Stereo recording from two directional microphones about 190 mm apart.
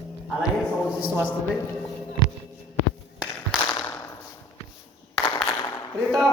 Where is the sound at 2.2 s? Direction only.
25° left (ahead or behind).